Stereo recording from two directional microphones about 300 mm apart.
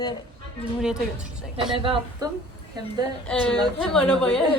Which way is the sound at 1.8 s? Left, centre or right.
Centre.